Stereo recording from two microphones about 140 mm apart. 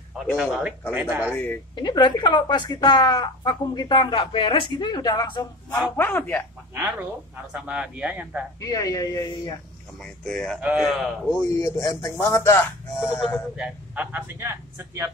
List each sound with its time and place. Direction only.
0.4 s speech: 10° right (ahead or behind)
1.3 s speech: 15° left (ahead or behind)
1.8 s speech: 30° left (ahead or behind)
5.9 s speech: 15° left (ahead or behind)
6.7 s speech: 15° right (ahead or behind)
8.5 s speech: 25° left (ahead or behind)
10.0 s speech: 5° left (ahead or behind)
10.6 s a man's voice: 5° right (ahead or behind)
11.5 s speech: 25° left (ahead or behind)
13.6 s speech: 10° right (ahead or behind)